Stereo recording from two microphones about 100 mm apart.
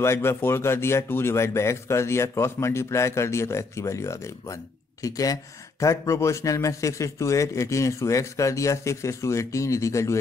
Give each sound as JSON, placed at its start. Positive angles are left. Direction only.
{"t": 0.0, "sound": "speech", "side_deg": 25}